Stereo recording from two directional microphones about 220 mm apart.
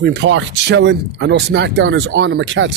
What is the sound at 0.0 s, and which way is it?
Speech, 50° right (ahead or behind).